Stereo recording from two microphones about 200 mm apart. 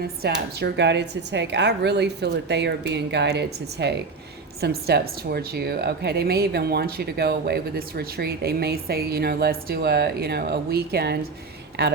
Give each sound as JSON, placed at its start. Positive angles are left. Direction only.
{"t": 0.0, "sound": "a woman's voice", "side_deg": -50}